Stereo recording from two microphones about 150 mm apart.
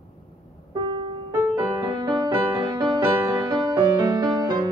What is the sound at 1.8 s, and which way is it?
Music, 30° right (ahead or behind).